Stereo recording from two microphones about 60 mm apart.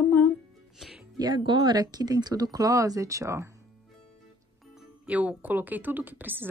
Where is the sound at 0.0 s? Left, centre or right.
Left.